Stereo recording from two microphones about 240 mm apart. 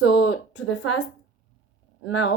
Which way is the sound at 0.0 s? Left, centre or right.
Left.